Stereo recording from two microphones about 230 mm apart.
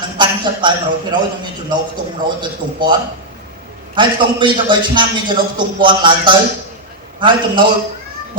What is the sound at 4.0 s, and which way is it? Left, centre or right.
A man's voice, right.